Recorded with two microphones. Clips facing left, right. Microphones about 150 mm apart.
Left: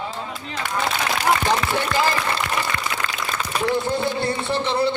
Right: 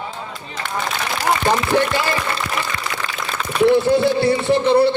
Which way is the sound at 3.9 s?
65° right (ahead or behind).